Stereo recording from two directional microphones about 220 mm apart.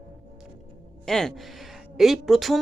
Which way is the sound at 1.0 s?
Centre (ahead or behind).